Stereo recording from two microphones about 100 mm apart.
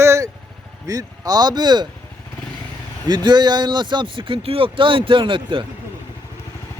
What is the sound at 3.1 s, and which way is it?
Speech, 45° right (ahead or behind).